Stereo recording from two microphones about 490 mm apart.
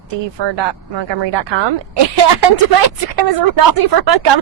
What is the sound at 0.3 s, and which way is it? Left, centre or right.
A woman's voice, right.